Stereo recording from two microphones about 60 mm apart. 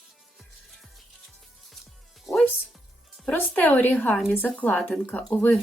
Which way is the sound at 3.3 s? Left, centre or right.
Left.